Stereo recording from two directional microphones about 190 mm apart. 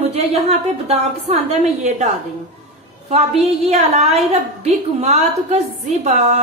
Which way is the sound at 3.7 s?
35° right (ahead or behind).